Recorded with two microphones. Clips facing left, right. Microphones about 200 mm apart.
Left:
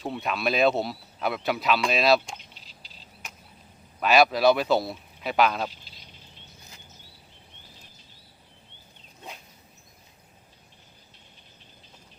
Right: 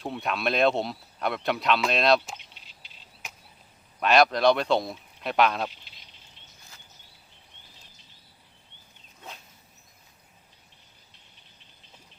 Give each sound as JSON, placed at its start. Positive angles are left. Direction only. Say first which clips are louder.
{"t": 0.0, "sound": "speech", "louder": "left 1 dB", "side_deg": 0}
{"t": 2.6, "sound": "bird", "louder": "left 3 dB", "side_deg": 35}
{"t": 4.0, "sound": "speech", "louder": "left 1 dB", "side_deg": 5}